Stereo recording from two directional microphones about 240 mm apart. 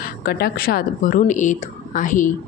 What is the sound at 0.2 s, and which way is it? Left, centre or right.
Speech, left.